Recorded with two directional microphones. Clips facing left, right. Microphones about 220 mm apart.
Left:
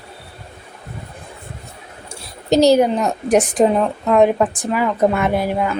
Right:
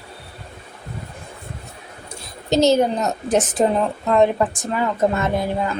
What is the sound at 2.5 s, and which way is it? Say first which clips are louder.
A woman's voice: left 3 dB; 15° left (ahead or behind).